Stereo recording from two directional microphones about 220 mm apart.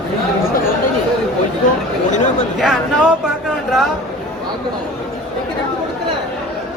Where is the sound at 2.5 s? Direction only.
5° right (ahead or behind).